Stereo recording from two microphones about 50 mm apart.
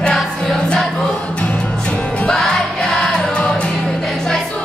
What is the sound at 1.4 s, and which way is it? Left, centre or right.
Music, left.